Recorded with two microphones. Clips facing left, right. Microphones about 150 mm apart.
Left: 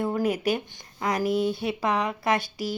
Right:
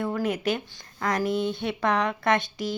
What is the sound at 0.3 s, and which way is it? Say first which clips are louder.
Speech: left 1 dB; 15° left (ahead or behind).